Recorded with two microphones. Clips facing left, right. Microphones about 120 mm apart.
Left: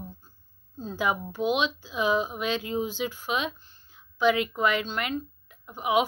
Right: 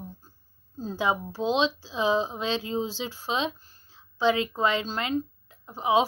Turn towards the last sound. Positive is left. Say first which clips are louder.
# right 2 dB
turn(degrees=-30)  # may be behind; listen again after turning